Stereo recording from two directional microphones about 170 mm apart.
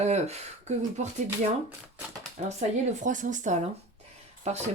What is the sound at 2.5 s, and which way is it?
A woman's voice, 45° right (ahead or behind).